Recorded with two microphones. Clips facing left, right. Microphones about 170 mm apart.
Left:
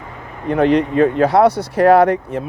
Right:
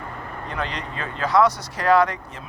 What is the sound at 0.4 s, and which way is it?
Speech, 60° left (ahead or behind).